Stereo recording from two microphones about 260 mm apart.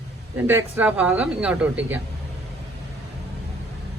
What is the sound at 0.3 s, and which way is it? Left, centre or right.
Speech, centre.